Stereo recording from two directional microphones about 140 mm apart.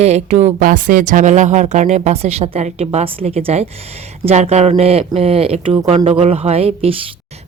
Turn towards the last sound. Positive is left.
turn(degrees=-45)  # may be behind; listen again after turning